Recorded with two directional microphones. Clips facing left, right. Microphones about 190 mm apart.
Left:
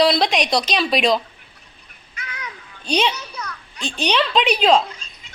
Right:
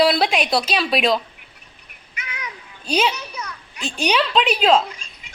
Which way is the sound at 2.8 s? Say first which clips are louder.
Even; 5° right (ahead or behind).